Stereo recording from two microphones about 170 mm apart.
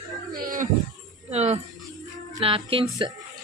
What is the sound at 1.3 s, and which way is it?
Speech, 40° right (ahead or behind).